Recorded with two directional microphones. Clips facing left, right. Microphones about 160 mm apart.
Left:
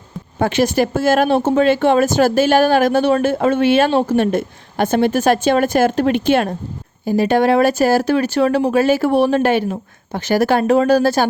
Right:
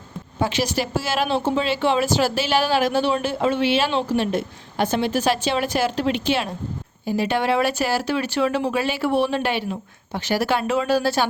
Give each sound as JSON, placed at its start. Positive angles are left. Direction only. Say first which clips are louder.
{"t": 0.3, "sound": "speech", "louder": "left 7 dB", "side_deg": 50}